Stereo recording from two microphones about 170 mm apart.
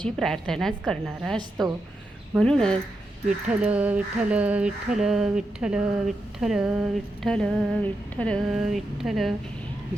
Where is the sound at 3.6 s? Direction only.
10° right (ahead or behind).